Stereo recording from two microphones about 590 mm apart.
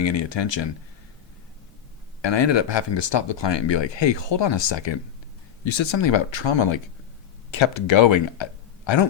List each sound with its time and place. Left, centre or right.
0.0 s speech: left
2.2 s speech: left